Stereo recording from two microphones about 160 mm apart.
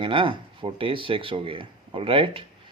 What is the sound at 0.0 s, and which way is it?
Speech, 30° right (ahead or behind).